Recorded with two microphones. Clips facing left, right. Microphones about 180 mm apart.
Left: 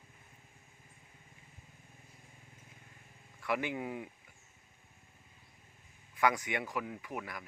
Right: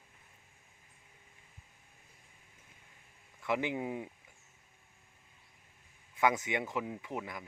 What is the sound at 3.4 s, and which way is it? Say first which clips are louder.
Speech: right 2 dB; 20° right (ahead or behind).